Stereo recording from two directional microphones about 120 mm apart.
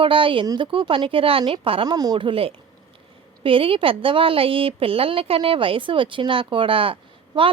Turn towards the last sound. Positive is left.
turn(degrees=-45)  # may be behind; listen again after turning